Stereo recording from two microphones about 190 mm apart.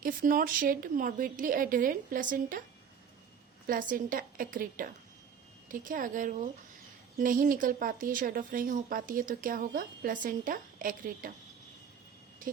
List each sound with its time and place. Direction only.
0.0 s speech: 45° right (ahead or behind)
3.7 s speech: 45° right (ahead or behind)